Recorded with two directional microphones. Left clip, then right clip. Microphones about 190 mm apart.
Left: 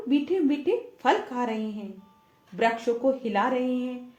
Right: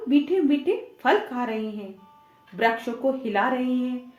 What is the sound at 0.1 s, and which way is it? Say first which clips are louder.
A woman's voice: right 3 dB; 40° left (ahead or behind).